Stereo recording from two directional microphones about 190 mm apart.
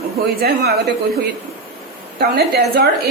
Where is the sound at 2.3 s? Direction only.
55° right (ahead or behind).